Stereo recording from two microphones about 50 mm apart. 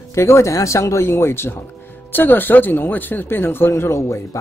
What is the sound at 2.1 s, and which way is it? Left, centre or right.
Speech, left.